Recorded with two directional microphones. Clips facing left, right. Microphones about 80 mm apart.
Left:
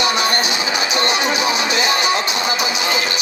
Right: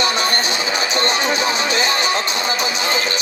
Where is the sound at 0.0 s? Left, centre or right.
Right.